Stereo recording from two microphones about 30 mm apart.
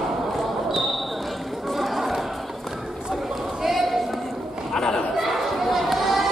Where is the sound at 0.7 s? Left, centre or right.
Centre.